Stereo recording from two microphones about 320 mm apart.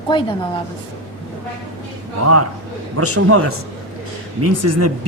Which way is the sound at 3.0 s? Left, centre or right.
Right.